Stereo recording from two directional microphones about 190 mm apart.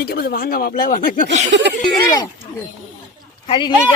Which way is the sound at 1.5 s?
60° right (ahead or behind).